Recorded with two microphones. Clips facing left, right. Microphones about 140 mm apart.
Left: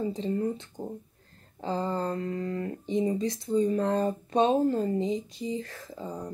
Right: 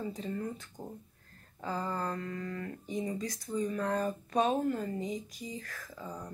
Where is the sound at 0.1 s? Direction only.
25° left (ahead or behind).